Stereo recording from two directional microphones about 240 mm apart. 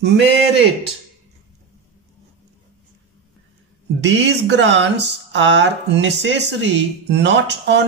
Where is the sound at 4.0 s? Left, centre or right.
Right.